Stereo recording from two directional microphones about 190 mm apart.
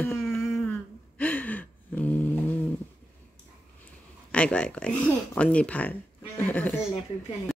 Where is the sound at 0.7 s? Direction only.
10° left (ahead or behind).